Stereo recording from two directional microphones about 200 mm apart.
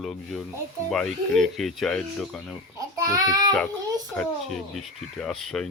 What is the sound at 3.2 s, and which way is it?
Child singing, 20° right (ahead or behind).